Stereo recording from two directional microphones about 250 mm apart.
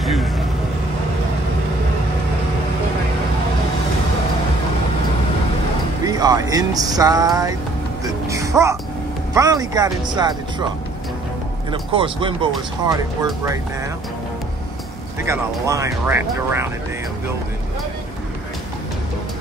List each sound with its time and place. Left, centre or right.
0.0 s vehicle: centre
6.0 s speech: centre
8.0 s music: centre
9.3 s speech: centre
11.7 s speech: centre
15.2 s speech: centre